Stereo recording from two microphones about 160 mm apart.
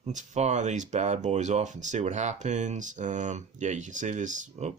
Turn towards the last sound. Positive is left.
turn(degrees=-50)  # may be behind; listen again after turning